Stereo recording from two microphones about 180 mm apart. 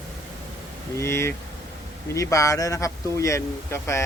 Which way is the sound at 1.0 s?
15° left (ahead or behind).